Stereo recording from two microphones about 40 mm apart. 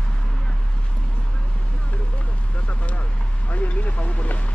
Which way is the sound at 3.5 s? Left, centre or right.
Left.